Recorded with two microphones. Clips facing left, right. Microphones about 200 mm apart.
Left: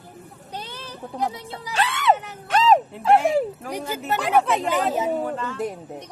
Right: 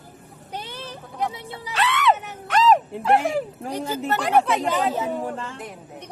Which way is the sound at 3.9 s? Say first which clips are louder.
Right 1 dB; 10° left (ahead or behind).